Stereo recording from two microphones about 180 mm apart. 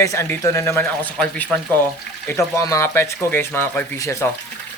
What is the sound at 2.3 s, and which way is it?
A man's voice, 15° left (ahead or behind).